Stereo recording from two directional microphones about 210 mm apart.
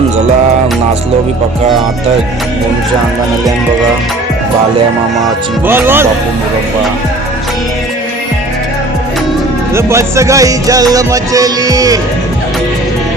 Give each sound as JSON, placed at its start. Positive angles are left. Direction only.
{"t": 5.6, "sound": "music", "side_deg": -10}
{"t": 9.7, "sound": "music", "side_deg": -15}